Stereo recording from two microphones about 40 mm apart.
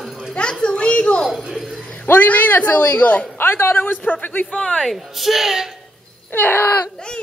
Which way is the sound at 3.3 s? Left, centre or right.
Left.